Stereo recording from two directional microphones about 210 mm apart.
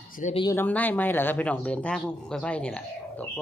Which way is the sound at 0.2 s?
35° left (ahead or behind).